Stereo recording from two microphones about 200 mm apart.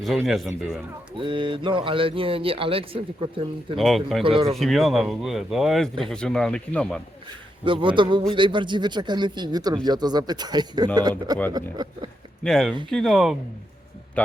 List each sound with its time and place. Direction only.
0.0 s speech: centre (ahead or behind)
1.2 s speech: 25° right (ahead or behind)
3.8 s speech: centre (ahead or behind)
4.2 s speech: 25° right (ahead or behind)
4.5 s speech: centre (ahead or behind)
7.6 s speech: 25° right (ahead or behind)
12.4 s speech: centre (ahead or behind)